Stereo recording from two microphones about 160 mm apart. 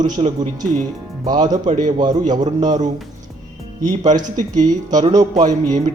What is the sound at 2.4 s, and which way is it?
Speech, 50° right (ahead or behind).